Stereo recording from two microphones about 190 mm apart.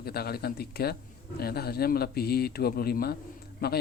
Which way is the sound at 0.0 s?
55° left (ahead or behind).